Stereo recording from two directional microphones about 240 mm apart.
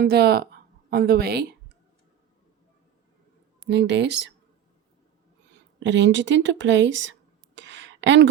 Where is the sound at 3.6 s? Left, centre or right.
Right.